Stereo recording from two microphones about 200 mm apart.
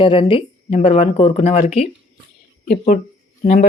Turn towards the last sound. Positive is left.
turn(degrees=45)  # may be behind; listen again after turning